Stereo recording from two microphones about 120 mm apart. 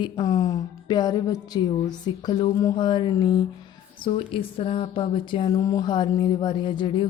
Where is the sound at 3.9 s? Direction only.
45° left (ahead or behind).